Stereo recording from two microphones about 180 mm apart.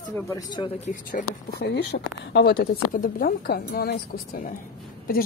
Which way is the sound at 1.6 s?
70° left (ahead or behind).